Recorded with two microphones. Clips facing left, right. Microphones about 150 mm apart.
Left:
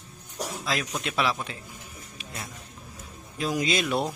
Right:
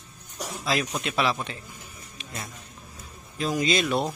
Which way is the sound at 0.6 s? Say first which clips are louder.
Right 4 dB; centre (ahead or behind).